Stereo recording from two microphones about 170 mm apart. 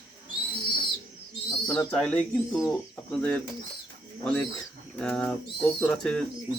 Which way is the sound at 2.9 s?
10° left (ahead or behind).